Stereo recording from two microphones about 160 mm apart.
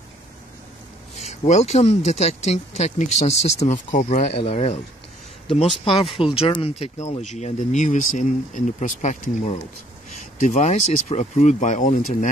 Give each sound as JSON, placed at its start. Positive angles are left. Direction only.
{"t": 1.1, "sound": "speech", "side_deg": 45}
{"t": 5.9, "sound": "speech", "side_deg": 35}